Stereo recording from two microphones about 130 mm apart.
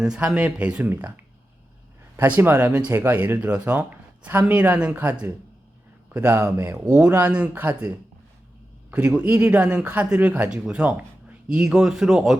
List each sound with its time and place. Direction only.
0.0 s speech: 5° right (ahead or behind)